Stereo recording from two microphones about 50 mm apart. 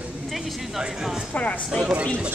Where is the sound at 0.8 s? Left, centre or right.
Centre.